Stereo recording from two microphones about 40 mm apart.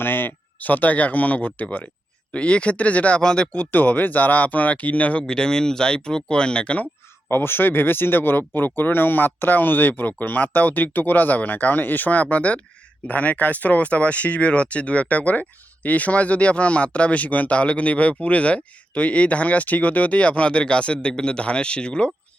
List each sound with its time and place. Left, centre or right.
0.0 s speech: left
2.3 s speech: left
3.2 s speech: left
3.5 s speech: left
5.2 s speech: centre
7.3 s speech: left